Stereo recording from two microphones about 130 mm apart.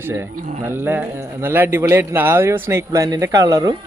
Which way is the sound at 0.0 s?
15° right (ahead or behind).